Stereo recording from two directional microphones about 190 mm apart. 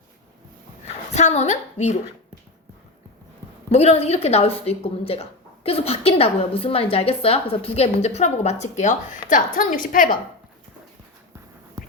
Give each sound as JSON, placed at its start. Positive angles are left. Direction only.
{"t": 1.1, "sound": "a woman's voice", "side_deg": 35}
{"t": 3.7, "sound": "a woman's voice", "side_deg": 35}